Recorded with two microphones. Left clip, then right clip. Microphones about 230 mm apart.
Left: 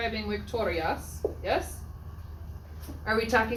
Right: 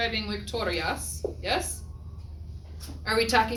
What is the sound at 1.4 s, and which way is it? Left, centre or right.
Speech, right.